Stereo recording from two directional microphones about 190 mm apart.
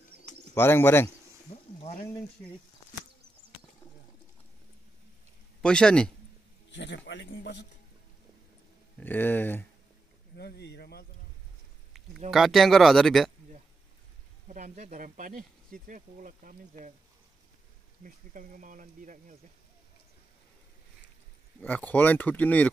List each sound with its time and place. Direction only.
0.6 s speech: 10° left (ahead or behind)
1.8 s a sound: 35° left (ahead or behind)
5.6 s speech: 5° left (ahead or behind)
6.7 s speech: 70° left (ahead or behind)
9.0 s speech: 10° left (ahead or behind)
10.3 s speech: 60° left (ahead or behind)
12.3 s speech: centre (ahead or behind)
14.5 s speech: 40° right (ahead or behind)
18.0 s speech: 45° right (ahead or behind)
21.5 s speech: 10° left (ahead or behind)